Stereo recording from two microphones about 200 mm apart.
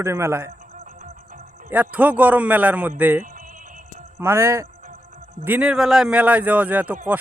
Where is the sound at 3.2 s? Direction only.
40° right (ahead or behind).